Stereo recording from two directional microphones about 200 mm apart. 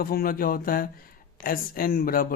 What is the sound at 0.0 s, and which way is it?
Speech, 50° left (ahead or behind).